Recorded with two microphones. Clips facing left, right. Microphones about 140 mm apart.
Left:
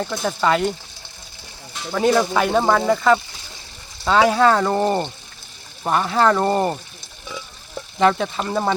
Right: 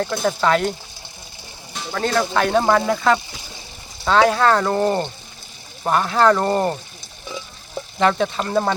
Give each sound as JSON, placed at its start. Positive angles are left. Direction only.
{"t": 0.0, "sound": "speech", "side_deg": 0}
{"t": 1.9, "sound": "speech", "side_deg": 10}
{"t": 7.9, "sound": "speech", "side_deg": 0}